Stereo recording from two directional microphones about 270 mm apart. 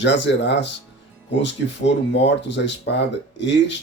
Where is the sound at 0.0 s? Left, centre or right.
Left.